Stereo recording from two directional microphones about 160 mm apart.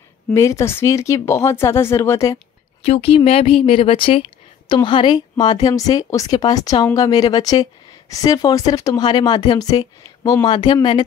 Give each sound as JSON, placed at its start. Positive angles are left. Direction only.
{"t": 0.3, "sound": "speech", "side_deg": 20}
{"t": 2.8, "sound": "a woman's voice", "side_deg": 35}